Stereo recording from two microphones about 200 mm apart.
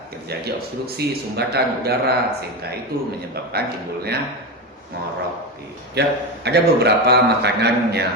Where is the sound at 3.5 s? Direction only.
55° right (ahead or behind).